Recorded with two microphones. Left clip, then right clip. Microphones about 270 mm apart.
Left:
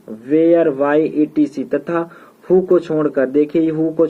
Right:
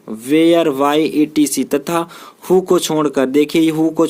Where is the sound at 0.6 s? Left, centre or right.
Right.